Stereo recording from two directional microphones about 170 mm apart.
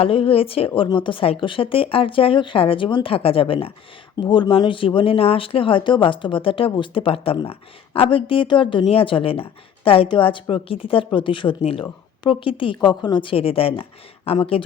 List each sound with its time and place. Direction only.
0.0 s speech: 30° left (ahead or behind)